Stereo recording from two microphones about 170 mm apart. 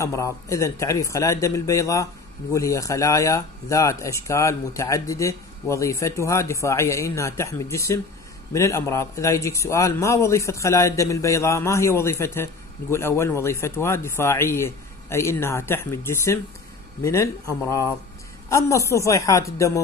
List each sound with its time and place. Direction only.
0.0 s speech: 15° left (ahead or behind)